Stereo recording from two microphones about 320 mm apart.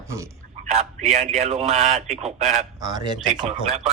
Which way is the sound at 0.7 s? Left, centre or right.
Right.